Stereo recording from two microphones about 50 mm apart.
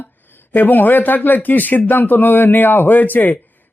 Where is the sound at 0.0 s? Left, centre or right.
Left.